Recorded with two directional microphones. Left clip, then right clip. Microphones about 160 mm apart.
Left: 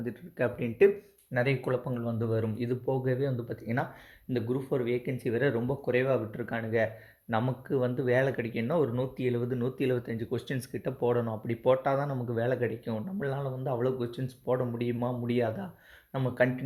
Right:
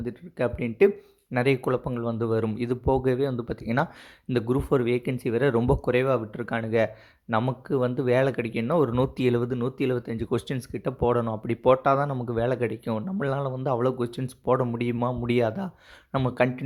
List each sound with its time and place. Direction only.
0.0 s speech: 20° right (ahead or behind)